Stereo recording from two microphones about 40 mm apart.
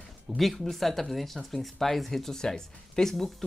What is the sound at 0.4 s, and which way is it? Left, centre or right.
Speech, centre.